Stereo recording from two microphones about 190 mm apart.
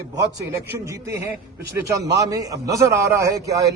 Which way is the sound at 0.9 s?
15° right (ahead or behind).